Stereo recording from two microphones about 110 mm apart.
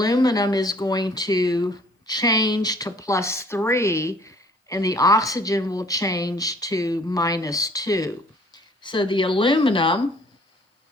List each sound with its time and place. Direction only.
0.0 s speech: 35° left (ahead or behind)
8.5 s speech: 45° left (ahead or behind)